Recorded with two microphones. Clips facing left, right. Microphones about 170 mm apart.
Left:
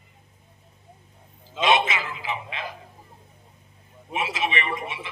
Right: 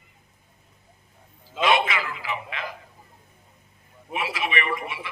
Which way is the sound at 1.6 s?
20° left (ahead or behind).